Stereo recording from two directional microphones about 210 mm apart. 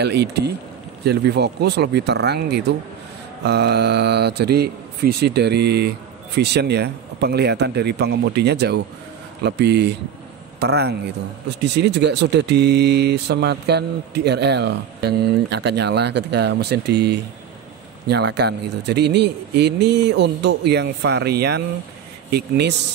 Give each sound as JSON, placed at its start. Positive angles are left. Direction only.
{"t": 0.0, "sound": "speech", "side_deg": -50}